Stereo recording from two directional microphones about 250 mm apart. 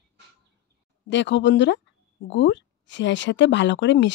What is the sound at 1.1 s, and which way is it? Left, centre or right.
Speech, left.